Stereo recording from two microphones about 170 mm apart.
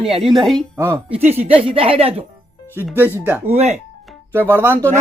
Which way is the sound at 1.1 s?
40° right (ahead or behind).